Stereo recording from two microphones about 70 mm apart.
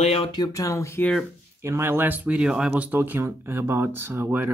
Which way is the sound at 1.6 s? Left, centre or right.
Right.